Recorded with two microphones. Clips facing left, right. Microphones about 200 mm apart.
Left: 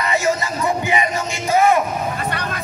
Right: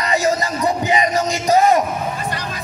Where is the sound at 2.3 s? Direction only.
60° left (ahead or behind).